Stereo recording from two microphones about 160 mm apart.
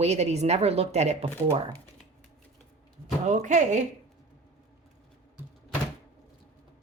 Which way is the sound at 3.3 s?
50° right (ahead or behind).